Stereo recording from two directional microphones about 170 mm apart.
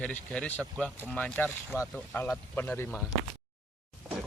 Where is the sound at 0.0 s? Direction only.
5° left (ahead or behind).